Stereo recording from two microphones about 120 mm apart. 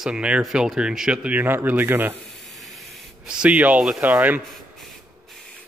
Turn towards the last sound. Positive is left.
turn(degrees=-15)  # may be behind; listen again after turning